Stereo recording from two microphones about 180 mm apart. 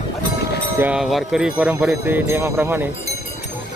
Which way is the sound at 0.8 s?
5° right (ahead or behind).